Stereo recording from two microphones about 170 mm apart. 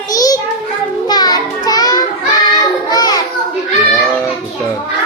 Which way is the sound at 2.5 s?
25° left (ahead or behind).